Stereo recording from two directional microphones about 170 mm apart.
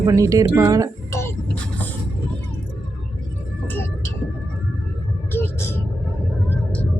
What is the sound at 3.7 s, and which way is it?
Vehicle, 15° left (ahead or behind).